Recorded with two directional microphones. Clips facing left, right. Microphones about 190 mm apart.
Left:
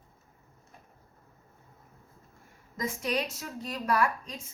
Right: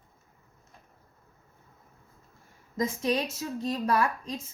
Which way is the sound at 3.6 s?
30° right (ahead or behind).